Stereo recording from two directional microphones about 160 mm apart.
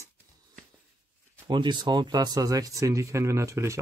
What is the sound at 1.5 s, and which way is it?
Speech, 30° right (ahead or behind).